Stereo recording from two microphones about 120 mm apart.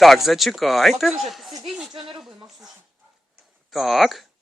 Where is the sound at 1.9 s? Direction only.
40° right (ahead or behind).